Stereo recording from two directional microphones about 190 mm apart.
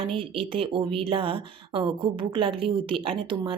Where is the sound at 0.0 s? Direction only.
30° right (ahead or behind).